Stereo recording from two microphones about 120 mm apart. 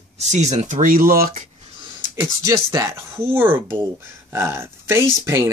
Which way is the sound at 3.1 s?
20° right (ahead or behind).